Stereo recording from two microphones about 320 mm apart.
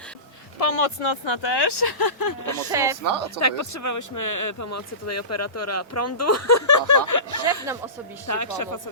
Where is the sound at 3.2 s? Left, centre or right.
Left.